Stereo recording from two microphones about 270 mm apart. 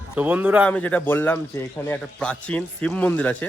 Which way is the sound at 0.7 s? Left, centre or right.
Centre.